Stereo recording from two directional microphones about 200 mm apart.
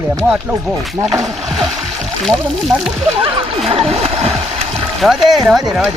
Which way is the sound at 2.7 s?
15° right (ahead or behind).